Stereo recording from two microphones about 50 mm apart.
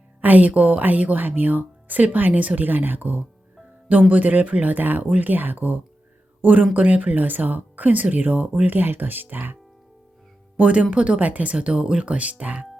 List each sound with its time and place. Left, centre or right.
0.2 s a woman's voice: right
10.6 s speech: right